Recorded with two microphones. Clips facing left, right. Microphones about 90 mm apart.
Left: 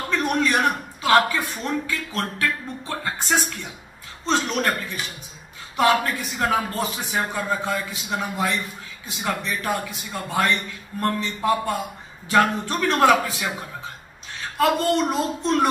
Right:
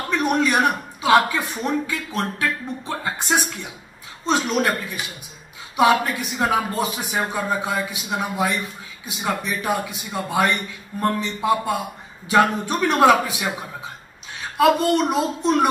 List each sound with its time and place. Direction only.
0.1 s a man's voice: 15° right (ahead or behind)
14.6 s speech: 15° right (ahead or behind)